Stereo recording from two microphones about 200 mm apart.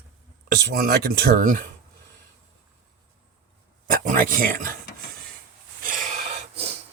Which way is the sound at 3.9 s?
45° right (ahead or behind).